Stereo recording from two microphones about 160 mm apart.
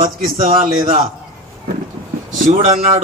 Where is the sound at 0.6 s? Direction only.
30° right (ahead or behind).